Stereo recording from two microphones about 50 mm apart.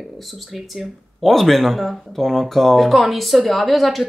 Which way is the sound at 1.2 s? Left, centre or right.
Centre.